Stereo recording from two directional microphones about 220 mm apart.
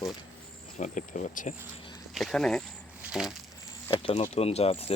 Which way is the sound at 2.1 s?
Centre (ahead or behind).